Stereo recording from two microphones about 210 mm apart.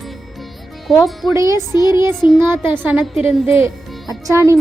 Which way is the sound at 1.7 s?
20° left (ahead or behind).